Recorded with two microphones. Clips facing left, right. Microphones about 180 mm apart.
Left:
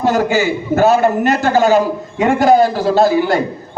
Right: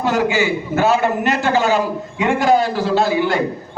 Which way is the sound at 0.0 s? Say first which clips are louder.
Left 3 dB; 40° left (ahead or behind).